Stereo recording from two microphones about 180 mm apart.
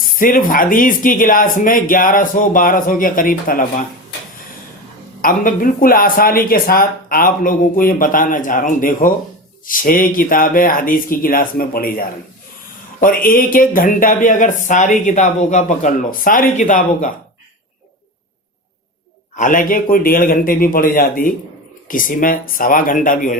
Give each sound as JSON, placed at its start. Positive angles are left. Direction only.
{"t": 0.0, "sound": "speech", "side_deg": 50}
{"t": 5.2, "sound": "speech", "side_deg": 50}
{"t": 19.4, "sound": "speech", "side_deg": 45}